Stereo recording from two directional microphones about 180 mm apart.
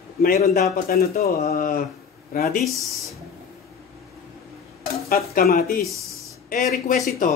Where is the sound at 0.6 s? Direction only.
55° left (ahead or behind).